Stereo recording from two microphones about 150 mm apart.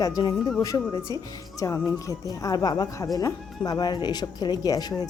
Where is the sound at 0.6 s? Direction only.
25° left (ahead or behind).